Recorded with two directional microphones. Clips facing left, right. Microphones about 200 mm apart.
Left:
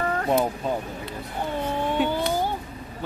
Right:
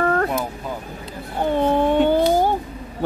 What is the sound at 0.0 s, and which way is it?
Cat, 65° right (ahead or behind).